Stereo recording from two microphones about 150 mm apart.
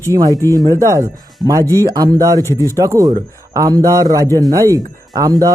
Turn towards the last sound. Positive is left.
turn(degrees=-25)  # may be behind; listen again after turning